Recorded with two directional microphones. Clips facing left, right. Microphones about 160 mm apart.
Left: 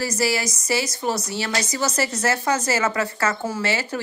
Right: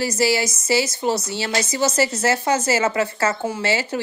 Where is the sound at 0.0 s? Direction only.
25° right (ahead or behind).